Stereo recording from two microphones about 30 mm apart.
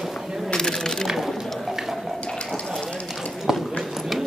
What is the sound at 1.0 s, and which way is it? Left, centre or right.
Pigeon, centre.